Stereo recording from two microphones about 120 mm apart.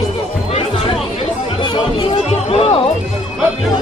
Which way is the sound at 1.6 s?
45° left (ahead or behind).